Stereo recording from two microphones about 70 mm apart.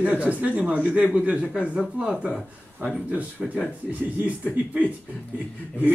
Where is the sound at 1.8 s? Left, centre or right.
Centre.